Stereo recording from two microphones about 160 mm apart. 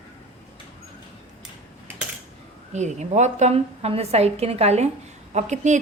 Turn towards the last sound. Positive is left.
turn(degrees=-45)  # may be behind; listen again after turning